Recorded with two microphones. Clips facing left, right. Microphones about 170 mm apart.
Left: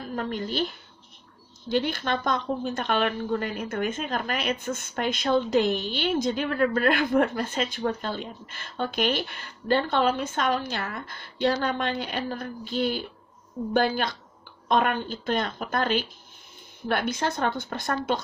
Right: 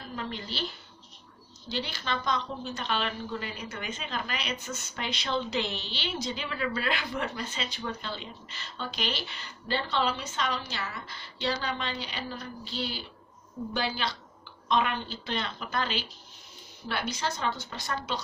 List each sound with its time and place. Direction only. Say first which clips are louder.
0.1 s a woman's voice: left 7 dB; 50° left (ahead or behind)